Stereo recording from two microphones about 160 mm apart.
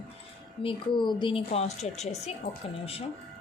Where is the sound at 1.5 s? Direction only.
45° left (ahead or behind).